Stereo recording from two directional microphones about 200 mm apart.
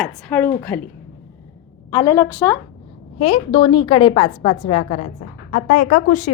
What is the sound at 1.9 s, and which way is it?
Speech, 20° left (ahead or behind).